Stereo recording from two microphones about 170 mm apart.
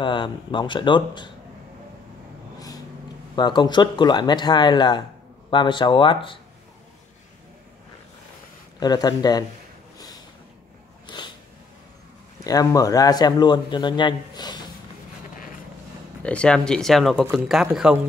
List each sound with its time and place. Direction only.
0.0 s a man's voice: 30° left (ahead or behind)
3.3 s a man's voice: 25° left (ahead or behind)
8.7 s a man's voice: 25° left (ahead or behind)
11.1 s a sound: 25° left (ahead or behind)
12.4 s a man's voice: 20° left (ahead or behind)
16.2 s speech: 5° left (ahead or behind)